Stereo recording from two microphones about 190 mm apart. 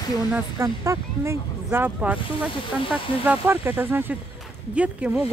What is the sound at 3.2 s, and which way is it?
Speech, 10° right (ahead or behind).